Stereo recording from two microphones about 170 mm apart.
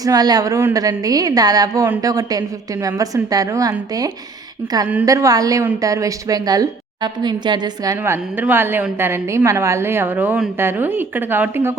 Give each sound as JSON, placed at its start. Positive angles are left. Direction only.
{"t": 0.0, "sound": "a woman's voice", "side_deg": -20}